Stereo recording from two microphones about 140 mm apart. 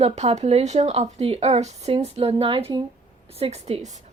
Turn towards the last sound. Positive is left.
turn(degrees=-50)  # may be behind; listen again after turning